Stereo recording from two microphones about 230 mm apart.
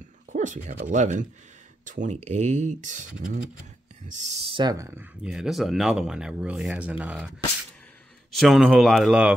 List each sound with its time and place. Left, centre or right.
0.3 s dog: right
0.7 s speech: right
4.1 s speech: right; by 9.3 s centre